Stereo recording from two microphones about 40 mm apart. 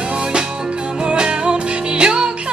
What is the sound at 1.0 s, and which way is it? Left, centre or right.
Music, right.